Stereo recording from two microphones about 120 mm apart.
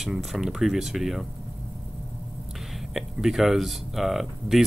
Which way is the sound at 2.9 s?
Centre (ahead or behind).